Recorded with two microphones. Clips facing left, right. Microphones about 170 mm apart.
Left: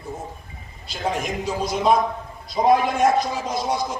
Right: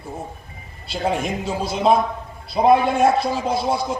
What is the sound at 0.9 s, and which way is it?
A man's voice, 30° right (ahead or behind).